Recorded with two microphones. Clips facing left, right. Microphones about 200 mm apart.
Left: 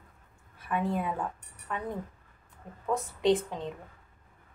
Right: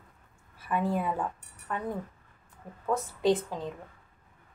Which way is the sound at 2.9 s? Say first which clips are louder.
Even; centre (ahead or behind).